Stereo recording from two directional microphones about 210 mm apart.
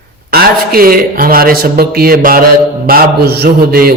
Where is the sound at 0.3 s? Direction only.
45° right (ahead or behind).